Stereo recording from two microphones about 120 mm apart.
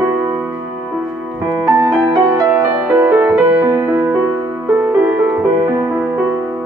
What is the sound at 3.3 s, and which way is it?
Music, 15° right (ahead or behind).